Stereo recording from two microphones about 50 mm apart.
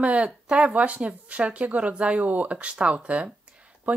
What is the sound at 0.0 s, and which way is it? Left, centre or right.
Speech, right.